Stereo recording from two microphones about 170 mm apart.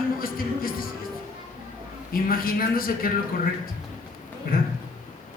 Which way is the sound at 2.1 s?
60° left (ahead or behind).